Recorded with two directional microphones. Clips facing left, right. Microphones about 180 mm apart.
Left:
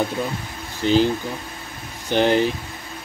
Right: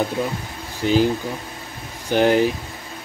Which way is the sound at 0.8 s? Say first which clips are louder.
Even; 10° right (ahead or behind).